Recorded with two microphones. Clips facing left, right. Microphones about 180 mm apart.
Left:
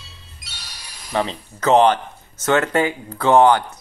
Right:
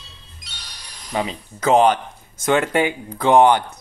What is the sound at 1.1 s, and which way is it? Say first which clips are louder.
Speech: left 2 dB; 10° right (ahead or behind).